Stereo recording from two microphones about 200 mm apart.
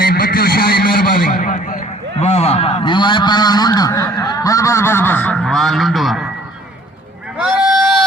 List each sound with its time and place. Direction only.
0.0 s vehicle: 50° left (ahead or behind); by 6.2 s centre (ahead or behind)
7.3 s sheep: 5° right (ahead or behind)